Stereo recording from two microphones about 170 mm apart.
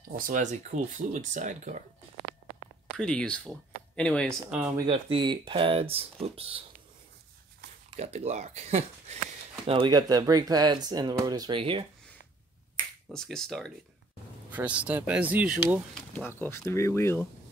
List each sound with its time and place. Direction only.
0.3 s speech: 45° right (ahead or behind)
3.0 s speech: 5° left (ahead or behind)
4.8 s speech: 30° right (ahead or behind)
7.9 s speech: 40° right (ahead or behind)
9.7 s speech: 25° right (ahead or behind)
13.1 s speech: 5° left (ahead or behind)
14.5 s speech: 10° right (ahead or behind)
16.2 s speech: 15° left (ahead or behind)